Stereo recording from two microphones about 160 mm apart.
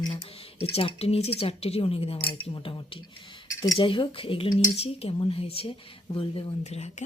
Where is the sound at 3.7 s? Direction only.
35° left (ahead or behind).